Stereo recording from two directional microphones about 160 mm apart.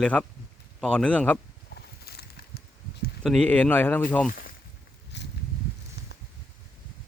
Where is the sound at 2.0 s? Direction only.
80° left.